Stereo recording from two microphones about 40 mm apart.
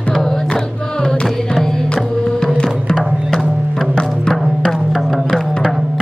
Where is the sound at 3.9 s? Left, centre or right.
Centre.